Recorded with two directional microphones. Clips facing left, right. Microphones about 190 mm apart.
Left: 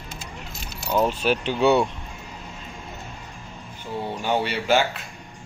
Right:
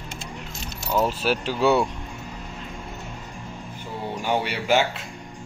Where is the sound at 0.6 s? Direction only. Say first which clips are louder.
Left 1 dB; 5° right (ahead or behind).